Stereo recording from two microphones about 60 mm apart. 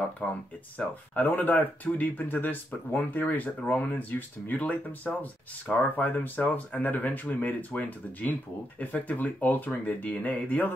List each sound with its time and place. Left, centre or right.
0.7 s speech: left